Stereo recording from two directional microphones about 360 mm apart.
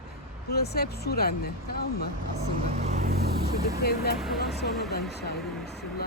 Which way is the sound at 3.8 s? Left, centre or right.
Left.